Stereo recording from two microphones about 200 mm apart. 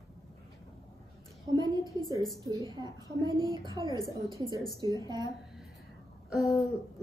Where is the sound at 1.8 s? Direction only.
20° left (ahead or behind).